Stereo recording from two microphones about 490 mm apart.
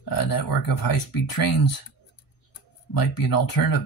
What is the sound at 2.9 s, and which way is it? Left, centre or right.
Speech, left.